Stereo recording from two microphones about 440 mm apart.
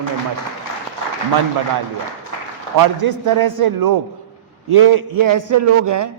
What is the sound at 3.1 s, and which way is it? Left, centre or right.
A man's voice, right.